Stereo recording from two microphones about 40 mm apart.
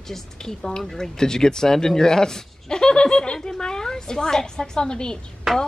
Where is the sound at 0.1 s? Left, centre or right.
Centre.